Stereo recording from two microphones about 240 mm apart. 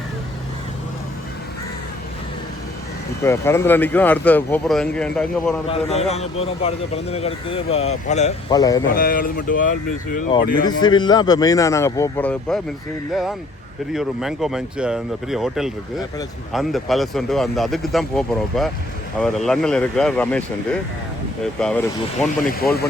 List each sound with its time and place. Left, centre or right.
3.2 s speech: centre
5.6 s a man's voice: left
8.5 s speech: centre
9.0 s speech: left
10.7 s speech: centre
13.9 s speech: centre